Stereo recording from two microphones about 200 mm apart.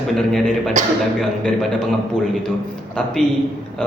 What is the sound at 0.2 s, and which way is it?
Speech, centre (ahead or behind).